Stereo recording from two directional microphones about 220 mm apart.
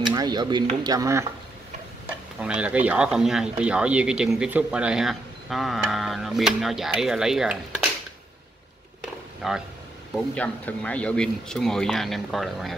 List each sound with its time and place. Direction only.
0.1 s speech: 20° right (ahead or behind)
2.4 s speech: 5° right (ahead or behind)
9.0 s a sound: centre (ahead or behind)
10.1 s speech: 5° left (ahead or behind)